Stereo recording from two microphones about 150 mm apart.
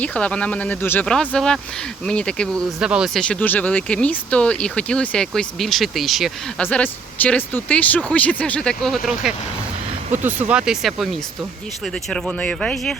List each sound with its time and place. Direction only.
0.0 s speech: 10° left (ahead or behind)
2.8 s speech: 5° right (ahead or behind)
3.2 s speech: 10° left (ahead or behind)
6.6 s speech: 10° left (ahead or behind)